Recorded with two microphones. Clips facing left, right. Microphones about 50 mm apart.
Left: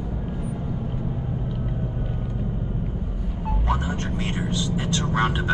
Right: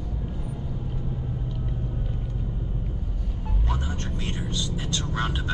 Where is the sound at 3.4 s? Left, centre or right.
Centre.